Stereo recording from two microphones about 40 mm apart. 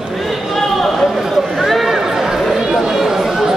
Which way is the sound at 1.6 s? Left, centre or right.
Centre.